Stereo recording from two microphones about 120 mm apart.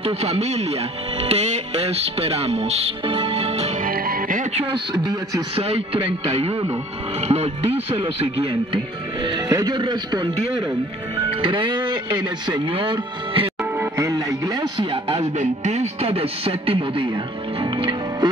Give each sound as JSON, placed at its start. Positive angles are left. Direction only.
{"t": 0.0, "sound": "speech", "side_deg": -60}
{"t": 4.9, "sound": "speech", "side_deg": -35}
{"t": 5.6, "sound": "speech", "side_deg": -55}
{"t": 9.5, "sound": "speech", "side_deg": -35}
{"t": 11.1, "sound": "music", "side_deg": -45}
{"t": 12.4, "sound": "speech", "side_deg": -40}
{"t": 13.7, "sound": "music", "side_deg": -25}
{"t": 14.8, "sound": "speech", "side_deg": -50}
{"t": 15.3, "sound": "speech", "side_deg": -70}